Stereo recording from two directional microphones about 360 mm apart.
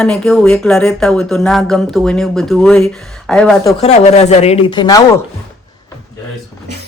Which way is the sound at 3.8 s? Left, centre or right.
Centre.